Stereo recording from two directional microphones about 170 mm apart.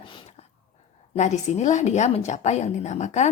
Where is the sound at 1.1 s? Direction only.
45° left (ahead or behind).